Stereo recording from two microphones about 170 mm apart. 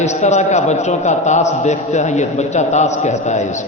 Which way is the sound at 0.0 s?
40° left (ahead or behind).